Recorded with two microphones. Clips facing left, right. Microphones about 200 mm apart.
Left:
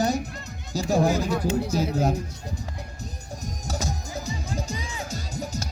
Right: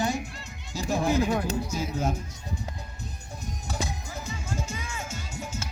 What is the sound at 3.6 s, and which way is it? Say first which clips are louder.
Music: left 3 dB; 40° left (ahead or behind).